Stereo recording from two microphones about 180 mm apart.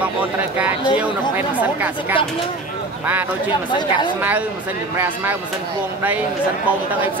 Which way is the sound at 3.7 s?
25° left (ahead or behind).